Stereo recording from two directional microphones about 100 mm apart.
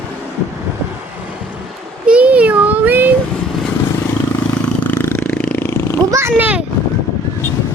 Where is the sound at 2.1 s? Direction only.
15° right (ahead or behind).